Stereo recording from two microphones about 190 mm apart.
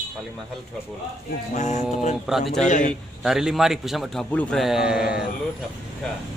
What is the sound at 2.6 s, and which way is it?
Speech, 40° left (ahead or behind).